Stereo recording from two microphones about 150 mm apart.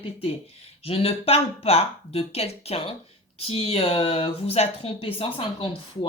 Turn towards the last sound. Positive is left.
turn(degrees=35)  # may be behind; listen again after turning